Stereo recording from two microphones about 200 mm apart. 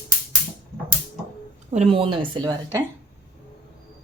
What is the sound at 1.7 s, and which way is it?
Speech, 30° right (ahead or behind).